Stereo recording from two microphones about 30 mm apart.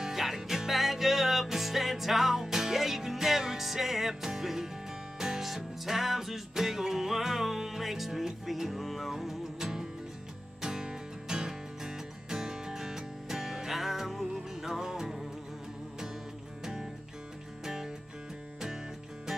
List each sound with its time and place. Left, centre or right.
0.0 s music: centre
17.6 s music: centre